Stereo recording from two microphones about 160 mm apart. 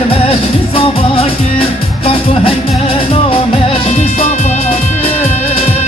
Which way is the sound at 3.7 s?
40° left (ahead or behind).